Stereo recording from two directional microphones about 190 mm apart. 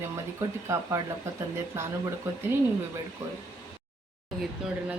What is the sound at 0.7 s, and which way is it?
Speech, 15° right (ahead or behind).